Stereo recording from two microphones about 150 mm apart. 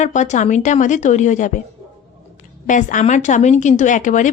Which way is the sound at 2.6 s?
60° left (ahead or behind).